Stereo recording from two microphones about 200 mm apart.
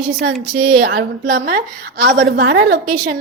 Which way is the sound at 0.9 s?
50° right (ahead or behind).